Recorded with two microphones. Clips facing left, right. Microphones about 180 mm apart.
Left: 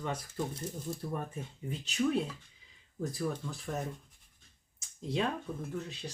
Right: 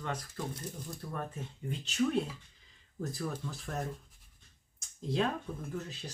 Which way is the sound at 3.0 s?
Centre (ahead or behind).